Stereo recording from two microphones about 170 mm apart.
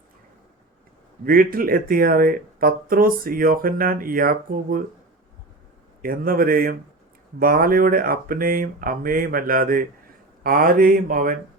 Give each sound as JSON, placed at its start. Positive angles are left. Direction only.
{"t": 1.2, "sound": "speech", "side_deg": -60}
{"t": 6.0, "sound": "speech", "side_deg": -60}